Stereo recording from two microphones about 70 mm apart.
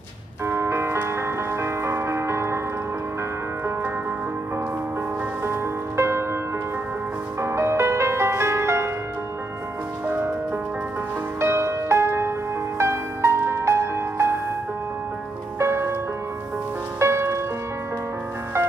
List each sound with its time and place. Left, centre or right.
0.5 s music: right
5.4 s music: right
7.3 s music: right
10.0 s music: right
11.3 s music: right
15.6 s music: right
17.0 s music: right